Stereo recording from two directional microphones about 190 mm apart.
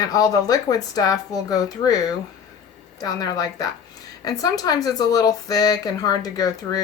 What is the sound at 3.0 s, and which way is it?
Speech, 20° left (ahead or behind).